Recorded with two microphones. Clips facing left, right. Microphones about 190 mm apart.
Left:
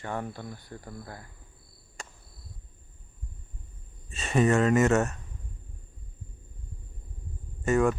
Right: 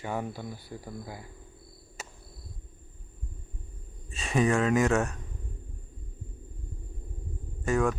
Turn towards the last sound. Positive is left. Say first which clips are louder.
# left 3 dB
turn(degrees=0)  # may be behind; listen again after turning